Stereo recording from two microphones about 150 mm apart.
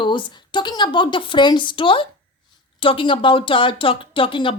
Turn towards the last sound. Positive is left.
turn(degrees=35)  # may be behind; listen again after turning